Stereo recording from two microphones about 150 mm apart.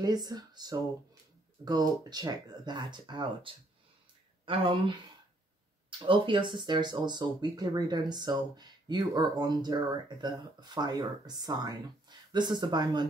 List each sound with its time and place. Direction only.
0.0 s speech: 25° right (ahead or behind)